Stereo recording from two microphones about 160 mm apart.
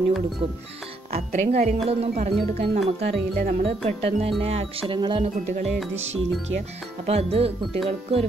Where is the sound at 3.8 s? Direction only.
40° right (ahead or behind).